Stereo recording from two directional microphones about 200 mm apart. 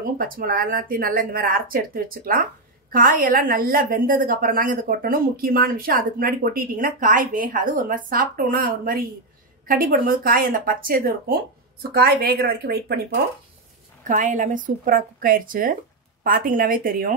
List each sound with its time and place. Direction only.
0.2 s a woman's voice: 45° right (ahead or behind)
14.0 s a woman's voice: 40° right (ahead or behind)